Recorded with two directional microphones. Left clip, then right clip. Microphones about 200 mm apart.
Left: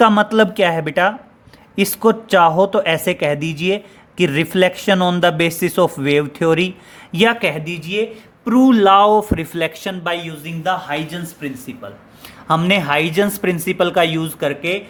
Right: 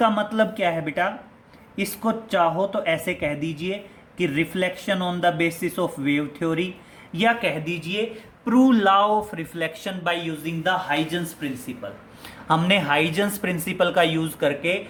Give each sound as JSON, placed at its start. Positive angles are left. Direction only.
{"t": 0.0, "sound": "speech", "side_deg": 55}
{"t": 12.5, "sound": "speech", "side_deg": 30}